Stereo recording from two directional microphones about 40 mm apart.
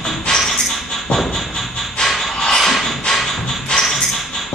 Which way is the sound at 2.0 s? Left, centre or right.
Centre.